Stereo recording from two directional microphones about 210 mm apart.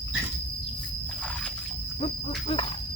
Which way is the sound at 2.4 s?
25° left (ahead or behind).